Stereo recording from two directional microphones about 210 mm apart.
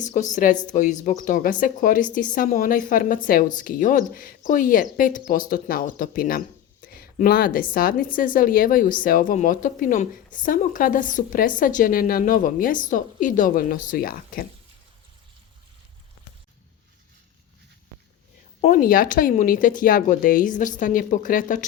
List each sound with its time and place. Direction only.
0.0 s a woman's voice: 35° left (ahead or behind)
18.6 s a woman's voice: 40° left (ahead or behind)